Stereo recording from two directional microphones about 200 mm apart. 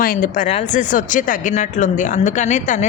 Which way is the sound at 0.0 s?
45° left (ahead or behind).